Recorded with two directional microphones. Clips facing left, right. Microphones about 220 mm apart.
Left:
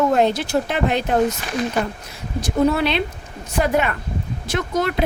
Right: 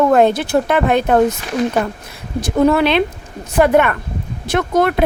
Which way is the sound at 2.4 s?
55° right (ahead or behind).